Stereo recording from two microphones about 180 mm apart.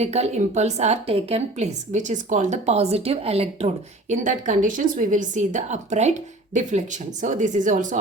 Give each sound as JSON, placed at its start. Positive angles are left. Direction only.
{"t": 0.0, "sound": "a woman's voice", "side_deg": -40}
{"t": 4.1, "sound": "a woman's voice", "side_deg": -45}